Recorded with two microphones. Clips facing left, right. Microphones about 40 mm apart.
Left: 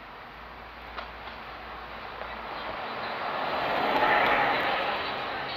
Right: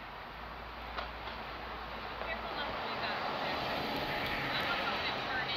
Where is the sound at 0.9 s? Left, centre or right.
Centre.